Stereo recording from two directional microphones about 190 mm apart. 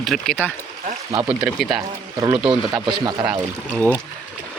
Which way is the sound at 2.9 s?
25° right (ahead or behind).